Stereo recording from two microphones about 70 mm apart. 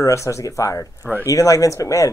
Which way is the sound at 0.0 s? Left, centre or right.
Left.